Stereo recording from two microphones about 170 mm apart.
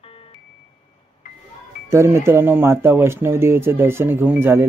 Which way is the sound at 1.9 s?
15° right (ahead or behind).